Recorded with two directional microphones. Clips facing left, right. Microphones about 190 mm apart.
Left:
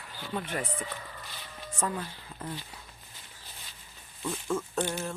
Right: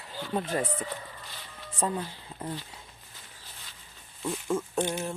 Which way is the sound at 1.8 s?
25° right (ahead or behind).